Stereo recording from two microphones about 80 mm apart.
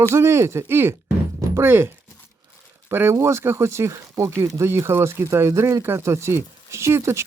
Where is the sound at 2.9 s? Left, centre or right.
Right.